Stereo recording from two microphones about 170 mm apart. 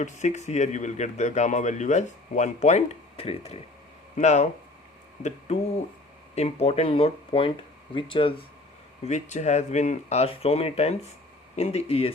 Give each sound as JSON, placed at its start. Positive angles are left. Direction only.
{"t": 0.0, "sound": "speech", "side_deg": 45}
{"t": 9.0, "sound": "speech", "side_deg": 45}